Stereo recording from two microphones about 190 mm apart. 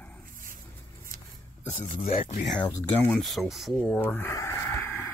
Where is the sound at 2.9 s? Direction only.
10° left (ahead or behind).